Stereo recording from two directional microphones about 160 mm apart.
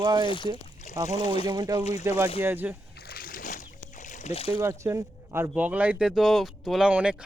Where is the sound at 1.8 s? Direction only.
40° left (ahead or behind).